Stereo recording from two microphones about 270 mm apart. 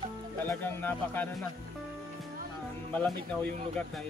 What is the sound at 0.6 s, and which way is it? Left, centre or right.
Speech, centre.